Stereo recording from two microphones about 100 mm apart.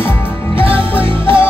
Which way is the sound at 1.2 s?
25° left (ahead or behind).